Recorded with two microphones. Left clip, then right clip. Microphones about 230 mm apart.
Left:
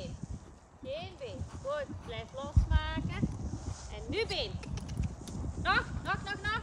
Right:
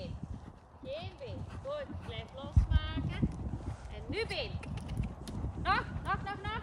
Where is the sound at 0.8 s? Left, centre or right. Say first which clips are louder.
Left 2 dB; left.